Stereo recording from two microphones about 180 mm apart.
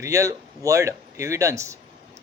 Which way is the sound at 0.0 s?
15° right (ahead or behind).